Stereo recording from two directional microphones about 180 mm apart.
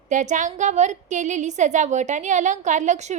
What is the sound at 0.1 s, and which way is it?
A woman's voice, 45° right (ahead or behind).